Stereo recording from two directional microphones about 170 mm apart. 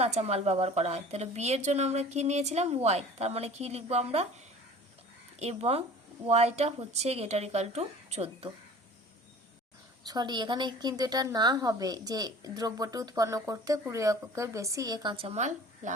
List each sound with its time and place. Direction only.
0.0 s a woman's voice: 40° right (ahead or behind)
5.4 s a woman's voice: 35° right (ahead or behind)
10.1 s a woman's voice: 25° right (ahead or behind); by 15.9 s 45° right (ahead or behind)